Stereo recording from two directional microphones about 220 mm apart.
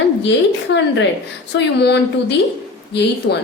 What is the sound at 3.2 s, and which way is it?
Speech, 65° left (ahead or behind).